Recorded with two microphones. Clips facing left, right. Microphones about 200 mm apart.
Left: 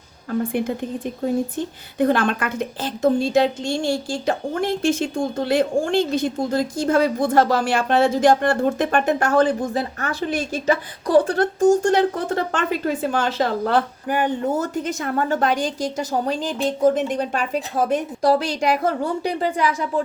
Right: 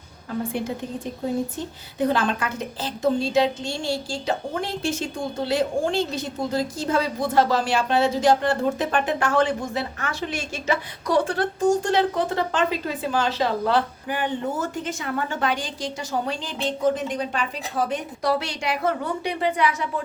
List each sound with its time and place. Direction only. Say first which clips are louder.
2.0 s speech: left 4 dB; 55° left (ahead or behind); by 19.9 s 35° left (ahead or behind)